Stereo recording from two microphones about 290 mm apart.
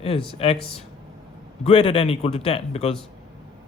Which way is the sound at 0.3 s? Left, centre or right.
Centre.